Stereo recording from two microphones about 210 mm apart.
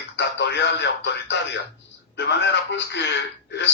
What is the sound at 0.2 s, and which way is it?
Speech, 55° left (ahead or behind).